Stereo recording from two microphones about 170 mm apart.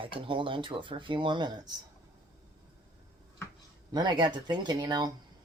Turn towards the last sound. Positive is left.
turn(degrees=-25)  # may be behind; listen again after turning